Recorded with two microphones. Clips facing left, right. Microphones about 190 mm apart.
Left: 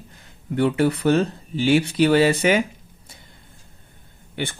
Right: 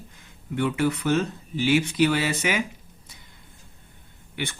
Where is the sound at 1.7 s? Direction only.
35° left (ahead or behind).